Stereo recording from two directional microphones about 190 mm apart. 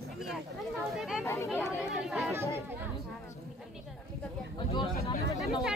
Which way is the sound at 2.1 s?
5° right (ahead or behind).